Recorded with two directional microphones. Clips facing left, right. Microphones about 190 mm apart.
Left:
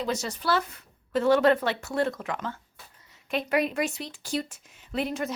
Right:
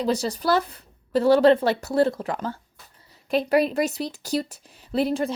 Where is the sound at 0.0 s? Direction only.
35° right (ahead or behind).